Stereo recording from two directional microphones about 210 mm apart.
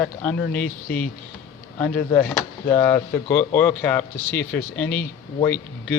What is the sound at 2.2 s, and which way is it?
Speech, 10° left (ahead or behind).